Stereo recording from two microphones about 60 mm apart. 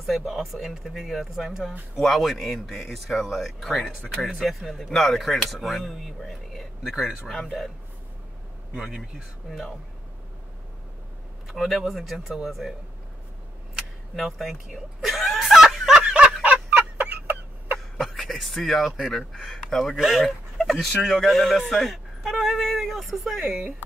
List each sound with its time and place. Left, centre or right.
0.0 s speech: centre
8.7 s speech: centre
11.4 s speech: centre
14.1 s snicker: centre
16.0 s snicker: centre
16.4 s fowl: right
17.9 s speech: centre
19.9 s speech: centre
20.2 s speech: centre